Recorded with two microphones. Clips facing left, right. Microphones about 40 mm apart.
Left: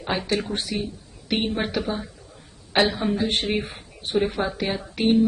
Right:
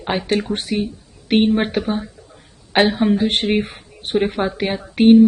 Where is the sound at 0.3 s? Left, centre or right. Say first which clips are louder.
Right 5 dB; right.